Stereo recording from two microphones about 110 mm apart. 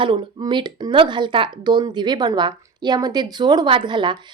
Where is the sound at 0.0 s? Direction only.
45° right (ahead or behind).